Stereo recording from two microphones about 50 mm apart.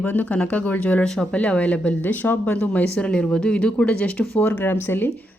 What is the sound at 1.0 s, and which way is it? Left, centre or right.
Speech, centre.